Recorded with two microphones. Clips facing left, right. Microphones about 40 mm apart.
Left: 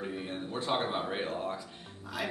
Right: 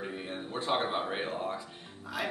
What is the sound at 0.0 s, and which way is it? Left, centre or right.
Speech, centre.